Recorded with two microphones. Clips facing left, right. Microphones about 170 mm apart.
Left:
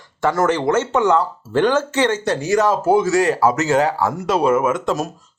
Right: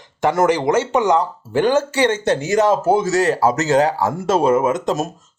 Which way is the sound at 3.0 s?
40° right (ahead or behind).